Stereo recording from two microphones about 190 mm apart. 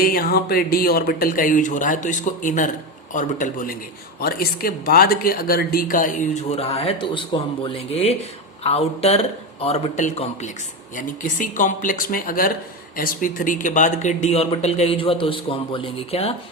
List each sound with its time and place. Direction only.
0.0 s a woman's voice: 55° left (ahead or behind); by 16.3 s 30° left (ahead or behind)